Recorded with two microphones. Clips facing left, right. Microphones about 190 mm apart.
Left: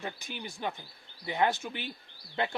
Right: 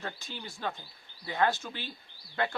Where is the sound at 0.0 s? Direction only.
15° left (ahead or behind).